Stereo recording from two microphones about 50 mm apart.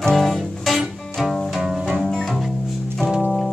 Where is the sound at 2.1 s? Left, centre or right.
Centre.